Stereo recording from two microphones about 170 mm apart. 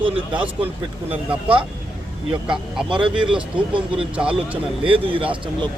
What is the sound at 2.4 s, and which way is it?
Speech, 5° right (ahead or behind).